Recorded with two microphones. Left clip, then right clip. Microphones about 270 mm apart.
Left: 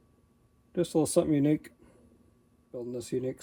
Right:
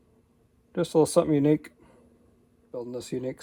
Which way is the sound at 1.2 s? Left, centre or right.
Centre.